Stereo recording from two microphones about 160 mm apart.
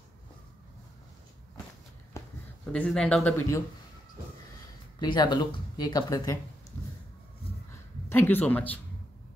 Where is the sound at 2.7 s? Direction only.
5° left (ahead or behind).